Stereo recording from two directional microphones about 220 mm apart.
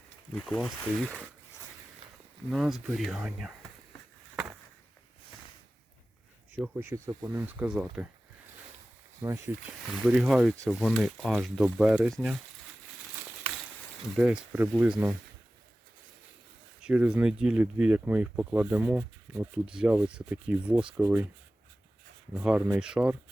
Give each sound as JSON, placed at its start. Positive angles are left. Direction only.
{"t": 0.3, "sound": "speech", "side_deg": 5}
{"t": 2.5, "sound": "speech", "side_deg": 0}
{"t": 6.6, "sound": "speech", "side_deg": -10}
{"t": 9.2, "sound": "speech", "side_deg": -10}
{"t": 14.2, "sound": "speech", "side_deg": -5}
{"t": 16.8, "sound": "speech", "side_deg": -5}
{"t": 22.4, "sound": "speech", "side_deg": -5}